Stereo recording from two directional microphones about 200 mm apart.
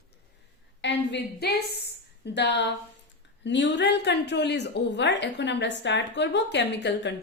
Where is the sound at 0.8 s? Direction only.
60° left (ahead or behind).